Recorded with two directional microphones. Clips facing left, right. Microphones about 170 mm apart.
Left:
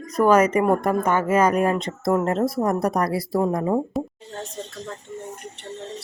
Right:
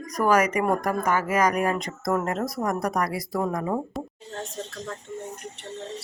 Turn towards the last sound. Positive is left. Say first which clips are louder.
# left 7 dB
turn(degrees=0)  # may be behind; listen again after turning